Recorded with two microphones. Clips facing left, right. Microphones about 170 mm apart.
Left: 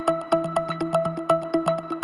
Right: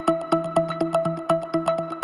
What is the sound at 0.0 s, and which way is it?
Music, centre (ahead or behind).